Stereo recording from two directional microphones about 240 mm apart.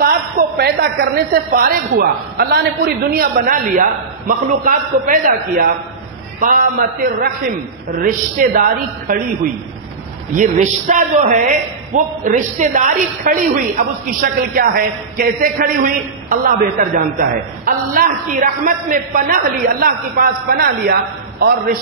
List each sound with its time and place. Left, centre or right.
0.0 s a man's voice: right